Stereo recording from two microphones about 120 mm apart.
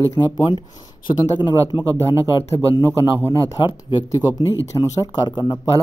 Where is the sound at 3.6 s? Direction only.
45° left (ahead or behind).